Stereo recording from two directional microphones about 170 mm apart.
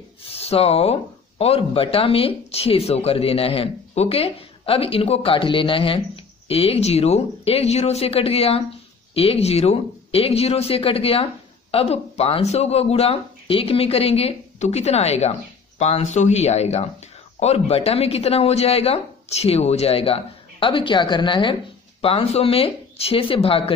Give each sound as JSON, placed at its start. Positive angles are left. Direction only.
{"t": 0.2, "sound": "speech", "side_deg": 35}